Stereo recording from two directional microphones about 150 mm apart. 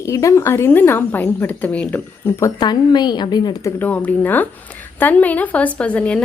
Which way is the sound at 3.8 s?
10° left (ahead or behind).